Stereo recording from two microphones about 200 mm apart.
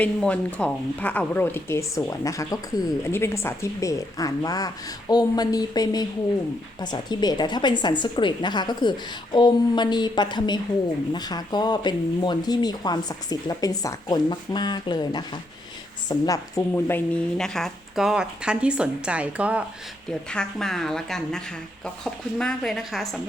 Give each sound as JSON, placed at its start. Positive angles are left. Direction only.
{"t": 0.0, "sound": "a woman's voice", "side_deg": 5}